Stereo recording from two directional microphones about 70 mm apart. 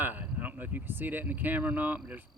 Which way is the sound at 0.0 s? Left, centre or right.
Right.